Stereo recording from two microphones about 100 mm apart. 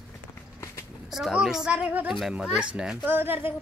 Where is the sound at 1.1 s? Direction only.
5° right (ahead or behind).